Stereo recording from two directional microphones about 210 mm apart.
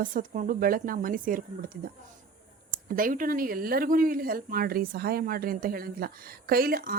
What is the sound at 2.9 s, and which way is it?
Speech, 40° right (ahead or behind).